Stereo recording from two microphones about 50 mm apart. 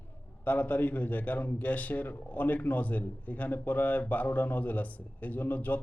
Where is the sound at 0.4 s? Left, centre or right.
Left.